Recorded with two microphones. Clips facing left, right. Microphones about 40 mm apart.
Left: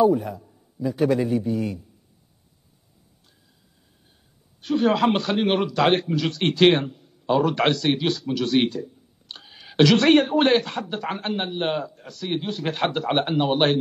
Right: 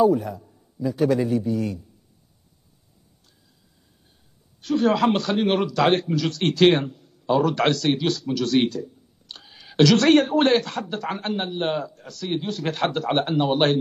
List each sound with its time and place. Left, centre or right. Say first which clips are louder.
0.0 s a man's voice: even; centre
4.6 s a man's voice: even; centre